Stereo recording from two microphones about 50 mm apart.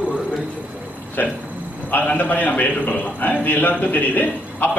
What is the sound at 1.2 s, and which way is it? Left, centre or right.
A man's voice, left.